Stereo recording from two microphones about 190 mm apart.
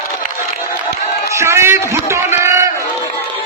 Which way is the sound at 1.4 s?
15° right (ahead or behind).